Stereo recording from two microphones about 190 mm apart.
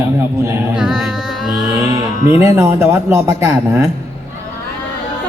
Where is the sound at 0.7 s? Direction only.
5° right (ahead or behind).